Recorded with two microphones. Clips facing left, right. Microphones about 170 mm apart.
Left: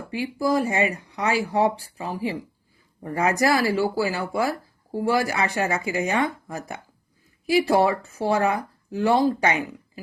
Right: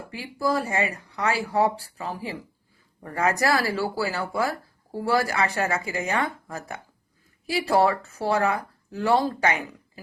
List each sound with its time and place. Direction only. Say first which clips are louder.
0.1 s speech: left 3 dB; 15° left (ahead or behind)